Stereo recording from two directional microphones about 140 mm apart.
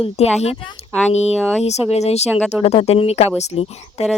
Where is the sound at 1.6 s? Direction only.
50° left (ahead or behind).